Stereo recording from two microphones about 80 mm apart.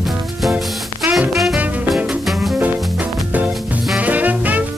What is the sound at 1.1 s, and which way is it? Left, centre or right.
Music, centre.